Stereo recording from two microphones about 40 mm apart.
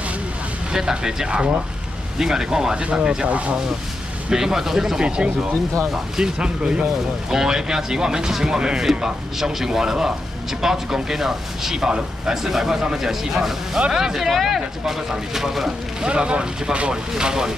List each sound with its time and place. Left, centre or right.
0.7 s speech: centre
3.3 s speech: right
4.3 s speech: centre
5.0 s speech: right; by 15.7 s centre
16.0 s speech: right